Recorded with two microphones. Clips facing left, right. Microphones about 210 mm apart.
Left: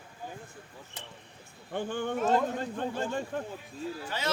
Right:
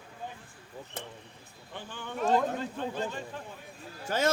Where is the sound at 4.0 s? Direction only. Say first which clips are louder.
Right 7 dB; 45° right (ahead or behind).